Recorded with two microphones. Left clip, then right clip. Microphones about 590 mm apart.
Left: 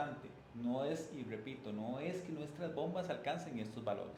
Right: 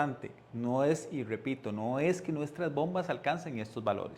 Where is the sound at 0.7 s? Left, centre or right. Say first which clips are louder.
Right 10 dB; right.